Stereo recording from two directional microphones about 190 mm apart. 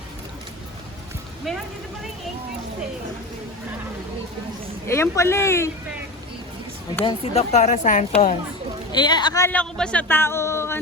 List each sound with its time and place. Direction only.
1.5 s speech: centre (ahead or behind)
4.9 s speech: 15° left (ahead or behind)
7.0 s speech: 30° left (ahead or behind)
8.9 s speech: 25° left (ahead or behind)